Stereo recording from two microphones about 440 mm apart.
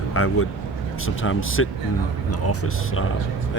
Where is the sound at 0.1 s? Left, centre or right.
Left.